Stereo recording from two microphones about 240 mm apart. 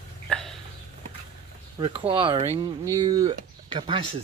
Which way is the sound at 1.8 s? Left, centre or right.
Right.